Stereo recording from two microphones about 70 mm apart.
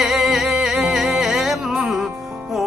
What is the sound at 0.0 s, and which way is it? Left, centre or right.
Music, centre.